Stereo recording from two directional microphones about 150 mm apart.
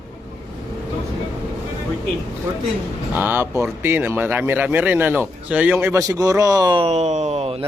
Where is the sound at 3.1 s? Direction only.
10° right (ahead or behind).